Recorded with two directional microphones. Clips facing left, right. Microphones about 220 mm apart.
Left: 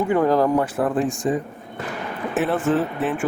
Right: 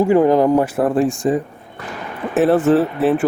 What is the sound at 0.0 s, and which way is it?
Speech, 25° right (ahead or behind).